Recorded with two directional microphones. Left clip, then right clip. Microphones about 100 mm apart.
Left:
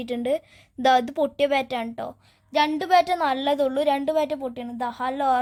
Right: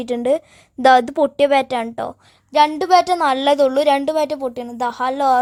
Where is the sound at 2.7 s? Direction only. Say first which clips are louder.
Right 5 dB; 50° right (ahead or behind).